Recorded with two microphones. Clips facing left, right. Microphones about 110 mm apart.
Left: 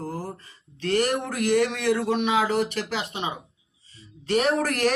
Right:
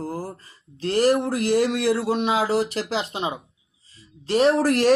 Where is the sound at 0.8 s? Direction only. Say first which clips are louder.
Right 4 dB; 35° right (ahead or behind).